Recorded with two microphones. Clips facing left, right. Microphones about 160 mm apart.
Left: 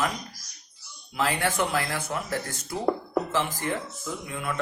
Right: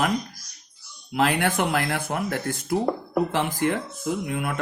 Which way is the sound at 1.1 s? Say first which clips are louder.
Right 4 dB; 65° right (ahead or behind).